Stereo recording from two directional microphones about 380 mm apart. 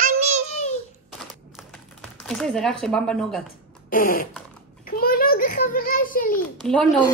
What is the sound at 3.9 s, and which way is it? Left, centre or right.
Fart, left.